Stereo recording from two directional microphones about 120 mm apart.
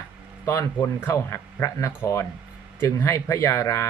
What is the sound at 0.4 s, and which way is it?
Speech, 25° left (ahead or behind).